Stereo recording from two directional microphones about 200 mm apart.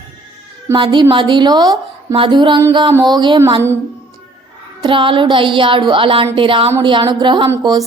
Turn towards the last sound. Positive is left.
turn(degrees=-20)  # may be behind; listen again after turning